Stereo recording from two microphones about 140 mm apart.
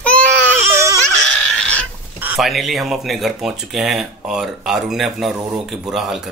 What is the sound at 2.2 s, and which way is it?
Speech, 5° right (ahead or behind).